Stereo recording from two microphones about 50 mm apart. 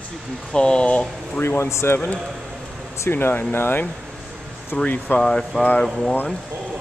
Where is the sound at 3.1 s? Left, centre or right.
Left.